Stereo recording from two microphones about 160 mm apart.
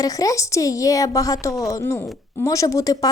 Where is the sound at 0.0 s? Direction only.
20° left (ahead or behind).